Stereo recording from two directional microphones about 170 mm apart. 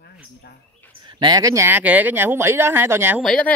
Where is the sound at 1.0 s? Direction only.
30° right (ahead or behind); by 3.2 s 15° right (ahead or behind).